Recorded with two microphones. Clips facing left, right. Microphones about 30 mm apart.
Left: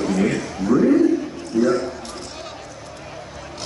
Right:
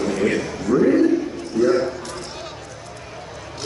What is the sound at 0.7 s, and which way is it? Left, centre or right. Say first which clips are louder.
Speech: even; right.